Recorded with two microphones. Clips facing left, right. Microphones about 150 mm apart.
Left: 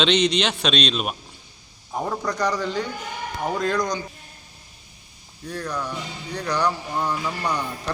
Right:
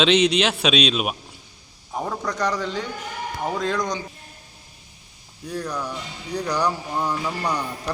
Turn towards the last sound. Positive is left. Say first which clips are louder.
# even
turn(degrees=0)  # may be behind; listen again after turning